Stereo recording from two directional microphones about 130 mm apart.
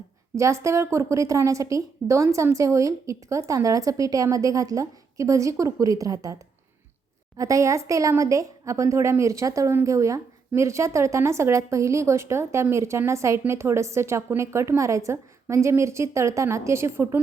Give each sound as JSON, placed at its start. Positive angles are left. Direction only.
{"t": 0.3, "sound": "a woman's voice", "side_deg": -25}
{"t": 7.3, "sound": "a woman's voice", "side_deg": -25}